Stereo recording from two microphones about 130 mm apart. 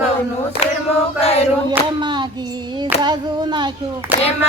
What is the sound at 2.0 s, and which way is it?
Clapping, 35° right (ahead or behind).